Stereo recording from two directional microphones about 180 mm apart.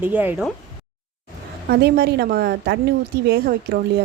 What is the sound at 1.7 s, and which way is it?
A woman's voice, 65° right (ahead or behind).